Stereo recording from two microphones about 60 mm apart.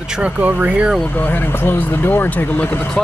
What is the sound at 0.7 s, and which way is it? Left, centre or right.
Speech, centre.